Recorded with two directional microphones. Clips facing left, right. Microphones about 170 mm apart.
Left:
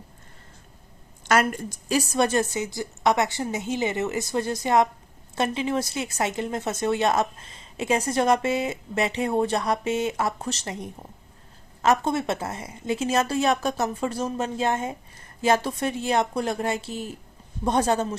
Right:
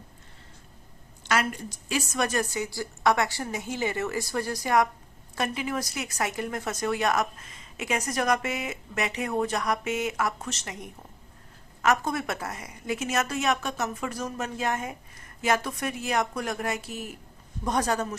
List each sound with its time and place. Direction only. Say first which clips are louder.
1.2 s a woman's voice: left 5 dB; 50° left (ahead or behind); by 18.1 s 25° left (ahead or behind)